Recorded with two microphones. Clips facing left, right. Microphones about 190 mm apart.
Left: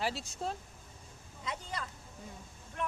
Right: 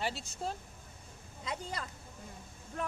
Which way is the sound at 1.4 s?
35° right (ahead or behind).